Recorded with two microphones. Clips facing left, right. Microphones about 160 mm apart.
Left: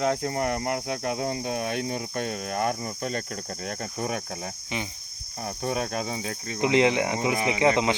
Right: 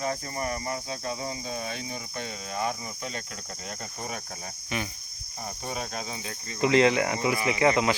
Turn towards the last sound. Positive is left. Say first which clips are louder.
# left 1 dB
turn(degrees=20)  # may be behind; listen again after turning